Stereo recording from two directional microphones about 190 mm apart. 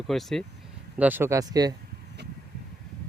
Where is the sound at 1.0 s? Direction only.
10° right (ahead or behind).